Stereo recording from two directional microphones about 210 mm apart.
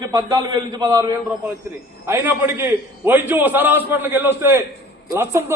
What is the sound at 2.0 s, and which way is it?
A man's voice, 10° right (ahead or behind).